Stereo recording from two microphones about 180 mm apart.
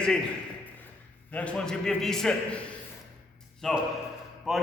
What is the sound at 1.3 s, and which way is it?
A man's voice, 5° left (ahead or behind).